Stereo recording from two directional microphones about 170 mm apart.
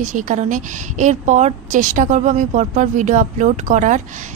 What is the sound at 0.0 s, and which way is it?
A woman's voice, 50° right (ahead or behind).